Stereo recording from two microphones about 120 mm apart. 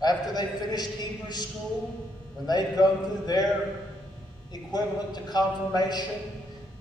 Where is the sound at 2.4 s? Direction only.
35° left (ahead or behind).